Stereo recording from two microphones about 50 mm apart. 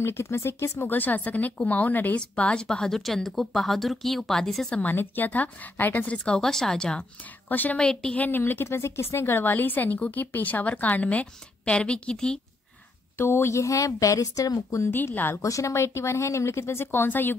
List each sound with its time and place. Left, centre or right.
0.0 s speech: left
0.7 s a woman's voice: left
2.1 s speech: left; by 4.6 s centre
4.8 s a woman's voice: left
6.1 s speech: centre
7.4 s a woman's voice: left
7.8 s speech: centre
8.2 s speech: left
8.6 s a woman's voice: left; by 12.4 s centre
13.2 s speech: left
13.5 s speech: left
15.1 s speech: left
15.5 s speech: left